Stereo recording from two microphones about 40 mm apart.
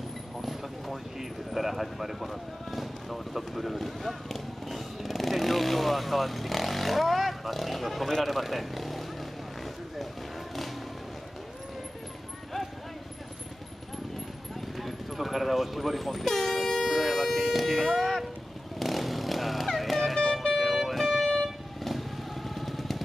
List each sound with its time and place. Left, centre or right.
0.4 s vehicle: centre
1.5 s a sound: centre
14.8 s vehicle: centre
17.9 s a sound: centre
18.8 s motorcycle: centre
20.5 s vehicle: centre
21.8 s motorcycle: centre